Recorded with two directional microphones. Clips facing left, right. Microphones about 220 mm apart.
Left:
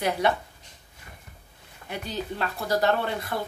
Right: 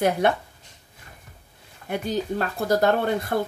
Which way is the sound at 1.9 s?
50° right (ahead or behind).